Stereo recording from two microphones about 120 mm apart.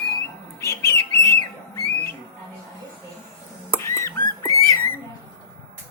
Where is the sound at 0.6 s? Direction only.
20° left (ahead or behind).